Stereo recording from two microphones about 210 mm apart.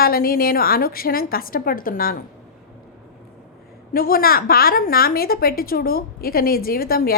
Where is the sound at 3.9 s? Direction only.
45° left (ahead or behind).